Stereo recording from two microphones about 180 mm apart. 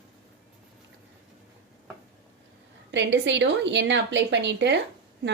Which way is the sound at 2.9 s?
75° right (ahead or behind).